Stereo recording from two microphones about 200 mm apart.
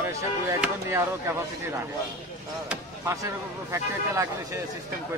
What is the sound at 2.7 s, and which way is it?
A man's voice, 15° right (ahead or behind).